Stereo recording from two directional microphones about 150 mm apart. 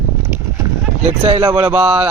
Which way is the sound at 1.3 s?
35° right (ahead or behind).